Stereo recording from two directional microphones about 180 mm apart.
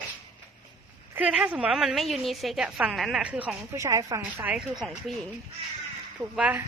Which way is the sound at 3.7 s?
15° right (ahead or behind).